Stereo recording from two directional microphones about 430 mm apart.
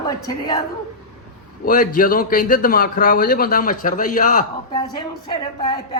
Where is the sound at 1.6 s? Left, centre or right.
Centre.